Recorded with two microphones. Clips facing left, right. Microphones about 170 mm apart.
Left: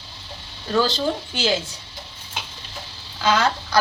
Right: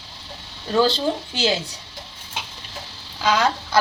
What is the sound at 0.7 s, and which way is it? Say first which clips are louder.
Speech: right 2 dB; 25° right (ahead or behind).